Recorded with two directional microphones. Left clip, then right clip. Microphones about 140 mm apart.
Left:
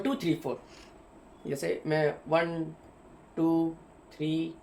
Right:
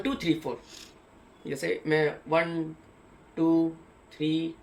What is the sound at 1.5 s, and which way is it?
Speech, 40° left (ahead or behind).